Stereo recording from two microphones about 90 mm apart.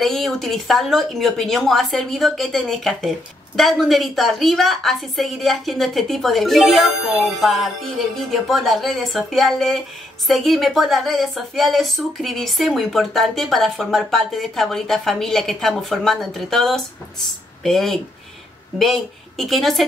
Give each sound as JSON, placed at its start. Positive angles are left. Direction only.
{"t": 0.0, "sound": "speech", "side_deg": 0}